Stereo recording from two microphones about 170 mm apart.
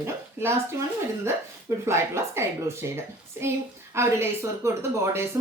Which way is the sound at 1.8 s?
15° right (ahead or behind).